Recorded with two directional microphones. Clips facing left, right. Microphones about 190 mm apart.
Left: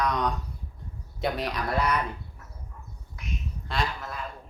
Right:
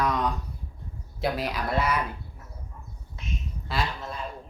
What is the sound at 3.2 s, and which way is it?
Duck, 25° right (ahead or behind).